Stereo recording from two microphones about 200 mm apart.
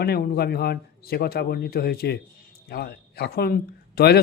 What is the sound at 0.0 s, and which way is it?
Speech, 50° left (ahead or behind).